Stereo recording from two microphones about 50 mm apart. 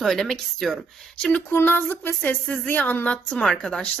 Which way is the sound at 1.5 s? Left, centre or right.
Left.